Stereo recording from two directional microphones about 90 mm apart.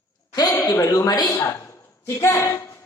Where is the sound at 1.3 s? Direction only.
25° left (ahead or behind).